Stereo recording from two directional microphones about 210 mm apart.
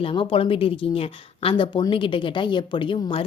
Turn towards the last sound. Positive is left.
turn(degrees=25)  # may be behind; listen again after turning